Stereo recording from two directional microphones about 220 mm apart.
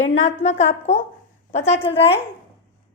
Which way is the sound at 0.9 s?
30° left (ahead or behind).